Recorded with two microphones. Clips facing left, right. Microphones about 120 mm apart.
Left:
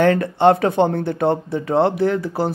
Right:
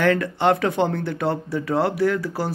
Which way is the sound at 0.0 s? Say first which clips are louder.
Left 5 dB; 25° left (ahead or behind).